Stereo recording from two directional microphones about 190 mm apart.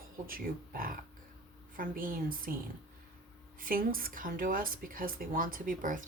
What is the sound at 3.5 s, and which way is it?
Speech, 50° right (ahead or behind).